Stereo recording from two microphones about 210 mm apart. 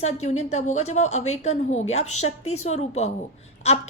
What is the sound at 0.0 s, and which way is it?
A woman's voice, 35° left (ahead or behind).